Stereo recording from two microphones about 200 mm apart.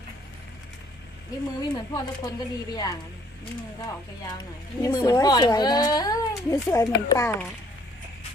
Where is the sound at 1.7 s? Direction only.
20° left (ahead or behind).